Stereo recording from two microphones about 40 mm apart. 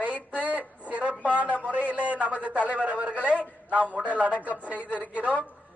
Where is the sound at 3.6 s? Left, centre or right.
Right.